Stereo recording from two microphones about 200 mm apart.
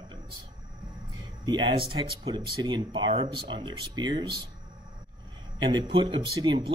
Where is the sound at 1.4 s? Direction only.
25° right (ahead or behind).